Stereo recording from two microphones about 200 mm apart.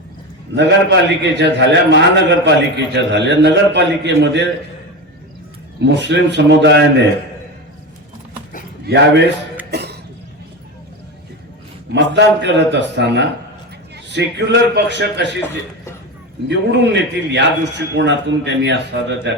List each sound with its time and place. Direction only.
0.5 s a man's voice: 60° right (ahead or behind)
5.8 s a man's voice: 60° right (ahead or behind)
8.9 s a man's voice: 50° right (ahead or behind)
9.7 s cough: 55° right (ahead or behind)
11.9 s a man's voice: 60° right (ahead or behind)
16.5 s a man's voice: 60° right (ahead or behind)